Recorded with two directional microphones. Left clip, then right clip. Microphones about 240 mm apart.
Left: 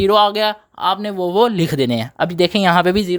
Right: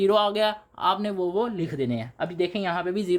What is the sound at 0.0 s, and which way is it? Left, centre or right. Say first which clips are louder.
Speech: left 8 dB; left.